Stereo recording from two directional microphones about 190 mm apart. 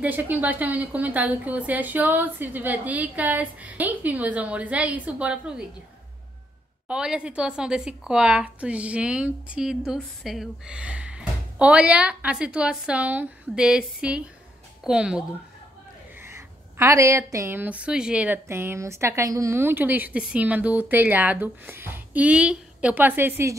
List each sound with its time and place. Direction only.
0.0 s a woman's voice: 10° right (ahead or behind)
6.9 s a woman's voice: 5° right (ahead or behind)